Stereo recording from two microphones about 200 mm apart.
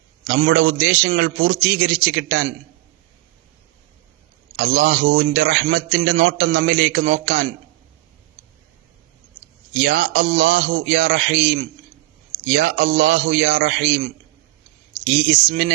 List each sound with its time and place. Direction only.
0.3 s a man's voice: 60° right (ahead or behind)
4.5 s a man's voice: 65° right (ahead or behind)
9.8 s a man's voice: 60° right (ahead or behind)
15.1 s a man's voice: 60° right (ahead or behind)